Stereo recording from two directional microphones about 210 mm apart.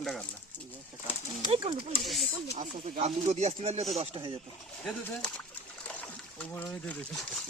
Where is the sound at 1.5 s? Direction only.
20° right (ahead or behind).